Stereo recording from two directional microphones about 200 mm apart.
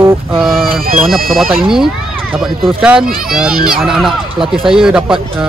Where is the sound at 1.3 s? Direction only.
Centre (ahead or behind).